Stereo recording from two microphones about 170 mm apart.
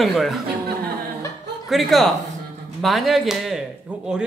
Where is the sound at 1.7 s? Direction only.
Centre (ahead or behind).